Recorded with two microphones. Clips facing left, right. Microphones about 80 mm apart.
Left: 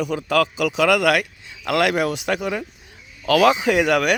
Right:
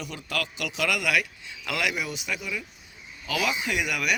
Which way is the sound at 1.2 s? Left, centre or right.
Left.